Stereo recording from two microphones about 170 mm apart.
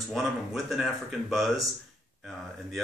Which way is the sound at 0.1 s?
Centre (ahead or behind).